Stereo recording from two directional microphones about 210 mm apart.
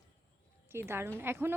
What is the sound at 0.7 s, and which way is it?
Speech, 10° right (ahead or behind).